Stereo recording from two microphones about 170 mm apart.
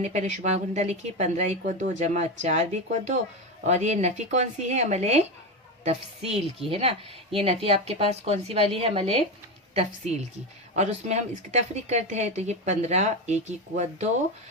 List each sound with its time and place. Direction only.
0.0 s speech: 45° right (ahead or behind)